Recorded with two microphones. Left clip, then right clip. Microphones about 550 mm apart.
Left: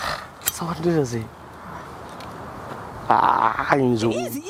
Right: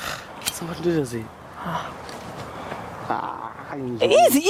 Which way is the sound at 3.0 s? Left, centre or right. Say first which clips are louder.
Left 12 dB; left.